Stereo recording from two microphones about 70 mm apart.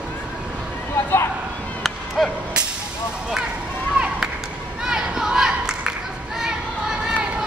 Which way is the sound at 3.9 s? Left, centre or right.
Centre.